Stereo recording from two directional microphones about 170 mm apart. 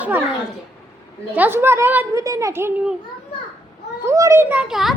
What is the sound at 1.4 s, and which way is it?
A woman's voice, 15° right (ahead or behind).